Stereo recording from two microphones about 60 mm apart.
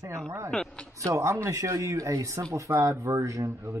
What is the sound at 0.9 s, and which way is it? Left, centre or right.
Speech, right.